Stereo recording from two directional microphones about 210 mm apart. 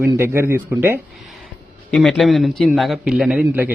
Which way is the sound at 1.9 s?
Centre (ahead or behind).